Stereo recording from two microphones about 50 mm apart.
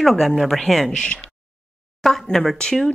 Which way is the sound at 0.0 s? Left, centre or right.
Centre.